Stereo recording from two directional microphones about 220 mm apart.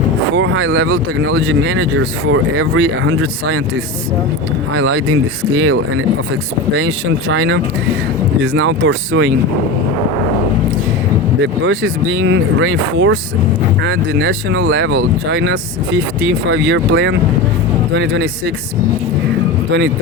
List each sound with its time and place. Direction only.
0.3 s speech: 60° right (ahead or behind)
4.7 s speech: 60° right (ahead or behind)
6.7 s speech: 55° right (ahead or behind)
11.6 s speech: 55° right (ahead or behind)